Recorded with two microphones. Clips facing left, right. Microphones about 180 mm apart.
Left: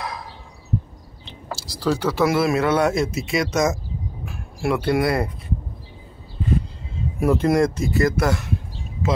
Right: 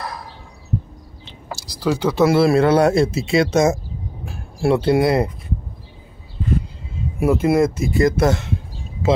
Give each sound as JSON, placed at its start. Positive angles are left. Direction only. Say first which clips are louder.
{"t": 1.8, "sound": "speech", "louder": "right 3 dB", "side_deg": -15}
{"t": 2.2, "sound": "speech", "louder": "right 5 dB", "side_deg": -30}
{"t": 7.2, "sound": "speech", "louder": "right 2 dB", "side_deg": -5}